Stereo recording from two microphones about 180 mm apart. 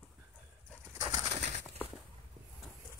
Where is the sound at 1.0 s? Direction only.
20° right (ahead or behind).